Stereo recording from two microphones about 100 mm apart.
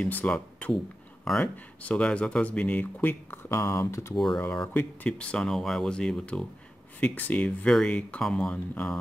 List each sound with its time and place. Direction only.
0.0 s speech: 15° left (ahead or behind)
1.2 s speech: 5° left (ahead or behind); by 4.1 s 25° left (ahead or behind)
4.1 s speech: 5° left (ahead or behind)